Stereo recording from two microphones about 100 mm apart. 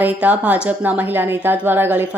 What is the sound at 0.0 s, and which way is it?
Speech, 15° right (ahead or behind).